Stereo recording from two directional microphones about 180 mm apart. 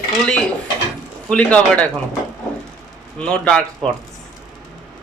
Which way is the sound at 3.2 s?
5° left (ahead or behind).